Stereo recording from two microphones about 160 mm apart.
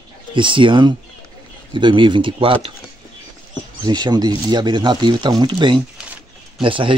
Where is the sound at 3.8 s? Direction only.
25° right (ahead or behind).